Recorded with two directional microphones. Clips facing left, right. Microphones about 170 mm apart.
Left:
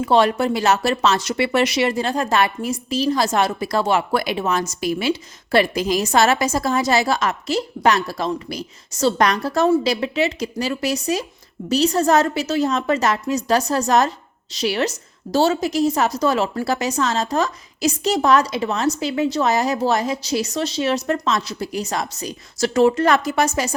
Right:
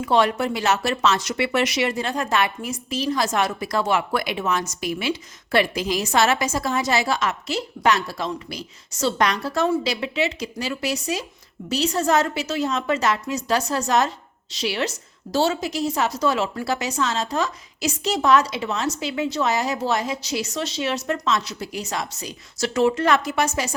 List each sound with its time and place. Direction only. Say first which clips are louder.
0.0 s speech: left 3 dB; 30° left (ahead or behind)